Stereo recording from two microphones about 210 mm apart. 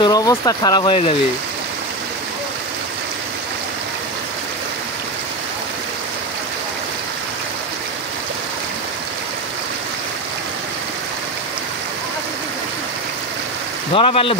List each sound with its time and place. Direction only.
0.0 s speech: 15° left (ahead or behind)
13.9 s speech: 25° left (ahead or behind)